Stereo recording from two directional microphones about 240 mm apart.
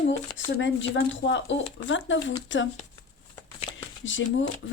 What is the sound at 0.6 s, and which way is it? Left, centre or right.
Speech, left.